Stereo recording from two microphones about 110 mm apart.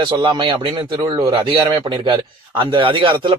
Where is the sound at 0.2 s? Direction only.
45° right (ahead or behind).